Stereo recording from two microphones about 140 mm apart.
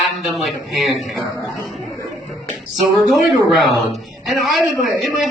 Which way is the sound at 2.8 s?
Centre (ahead or behind).